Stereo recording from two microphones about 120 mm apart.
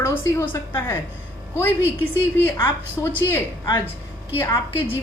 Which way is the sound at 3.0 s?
15° left (ahead or behind).